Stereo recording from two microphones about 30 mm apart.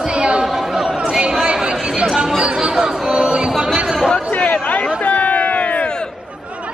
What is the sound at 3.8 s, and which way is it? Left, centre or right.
Chatter, right.